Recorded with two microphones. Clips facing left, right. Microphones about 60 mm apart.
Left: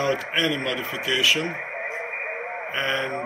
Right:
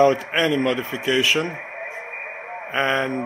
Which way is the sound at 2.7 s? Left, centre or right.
Right.